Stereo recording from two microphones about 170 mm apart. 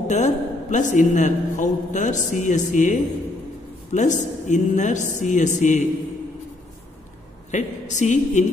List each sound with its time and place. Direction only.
0.1 s a woman's voice: 45° left (ahead or behind)
7.5 s a man's voice: 45° left (ahead or behind)